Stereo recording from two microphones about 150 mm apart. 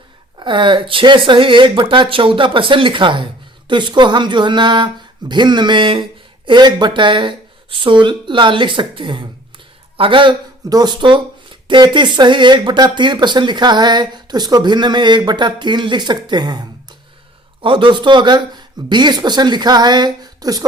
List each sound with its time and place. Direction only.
0.3 s speech: 35° right (ahead or behind)